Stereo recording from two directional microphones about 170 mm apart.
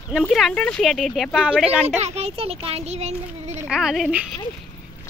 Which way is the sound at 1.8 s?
40° right (ahead or behind).